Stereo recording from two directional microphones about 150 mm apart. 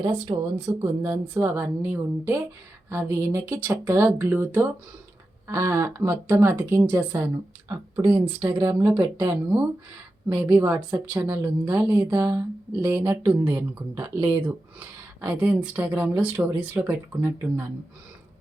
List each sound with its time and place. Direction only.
0.0 s speech: 30° right (ahead or behind)
1.0 s speech: 15° right (ahead or behind)
10.3 s speech: 15° right (ahead or behind)
13.1 s speech: 10° right (ahead or behind)